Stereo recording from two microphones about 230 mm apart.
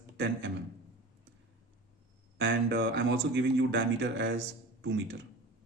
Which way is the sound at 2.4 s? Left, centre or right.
Right.